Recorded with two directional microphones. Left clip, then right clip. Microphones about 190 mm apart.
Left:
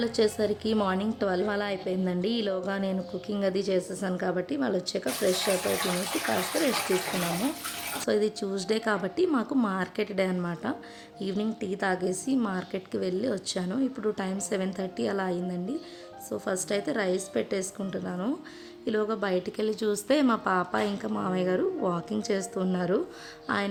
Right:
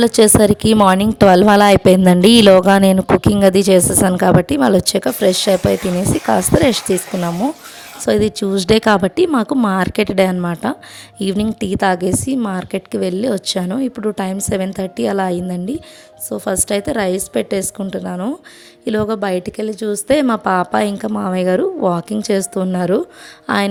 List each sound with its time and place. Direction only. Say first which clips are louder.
0.0 s a woman's voice: right 15 dB; 55° right (ahead or behind)
6.9 s a woman's voice: right 9 dB; 55° right (ahead or behind)